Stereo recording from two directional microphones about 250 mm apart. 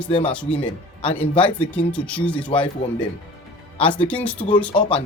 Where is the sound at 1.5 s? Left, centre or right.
Centre.